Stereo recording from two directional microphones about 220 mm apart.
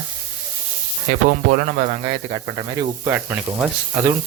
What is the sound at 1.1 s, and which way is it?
Speech, 40° right (ahead or behind).